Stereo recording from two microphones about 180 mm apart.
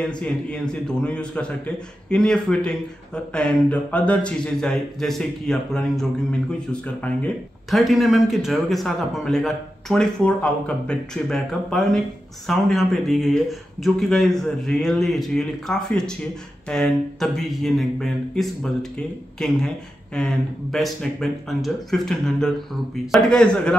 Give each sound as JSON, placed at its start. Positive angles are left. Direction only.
{"t": 0.2, "sound": "speech", "side_deg": 5}